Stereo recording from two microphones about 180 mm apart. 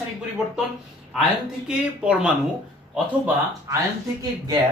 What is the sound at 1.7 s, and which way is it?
Speech, 5° right (ahead or behind).